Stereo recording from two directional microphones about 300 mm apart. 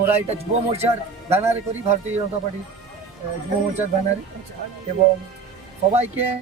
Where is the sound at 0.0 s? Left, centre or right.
Right.